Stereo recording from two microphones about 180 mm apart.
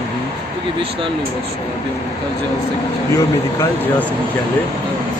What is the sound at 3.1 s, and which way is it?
Speech, 10° left (ahead or behind).